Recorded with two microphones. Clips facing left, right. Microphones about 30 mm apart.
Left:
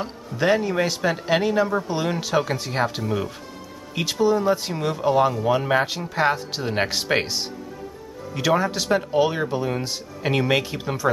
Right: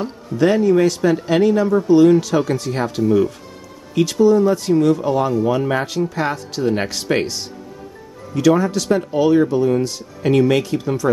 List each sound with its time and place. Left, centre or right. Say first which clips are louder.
0.0 s speech: right 6 dB; centre